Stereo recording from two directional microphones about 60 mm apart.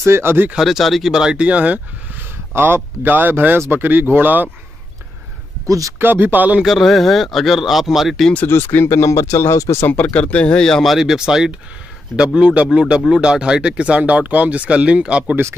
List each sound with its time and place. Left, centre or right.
0.0 s speech: right
0.6 s speech: centre
1.1 s speech: centre
2.5 s speech: right
5.7 s speech: right
5.9 s speech: right
6.6 s speech: centre
8.5 s speech: left
9.8 s speech: left
10.1 s speech: centre
10.8 s speech: centre